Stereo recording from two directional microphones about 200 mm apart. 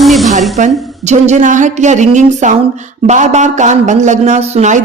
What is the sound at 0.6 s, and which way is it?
Speech, 35° right (ahead or behind).